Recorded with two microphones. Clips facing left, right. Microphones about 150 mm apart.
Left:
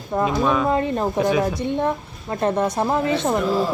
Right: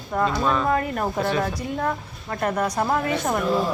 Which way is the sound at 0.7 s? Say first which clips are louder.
Left 3 dB; 25° left (ahead or behind).